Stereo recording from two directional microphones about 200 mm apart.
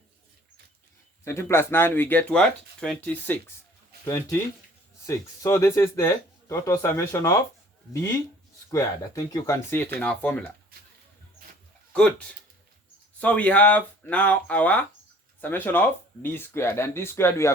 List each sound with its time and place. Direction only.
1.2 s speech: 15° left (ahead or behind)
8.7 s speech: 15° left (ahead or behind)
13.1 s speech: 5° left (ahead or behind)